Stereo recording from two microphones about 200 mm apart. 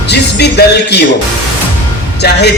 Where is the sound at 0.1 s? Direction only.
55° left (ahead or behind).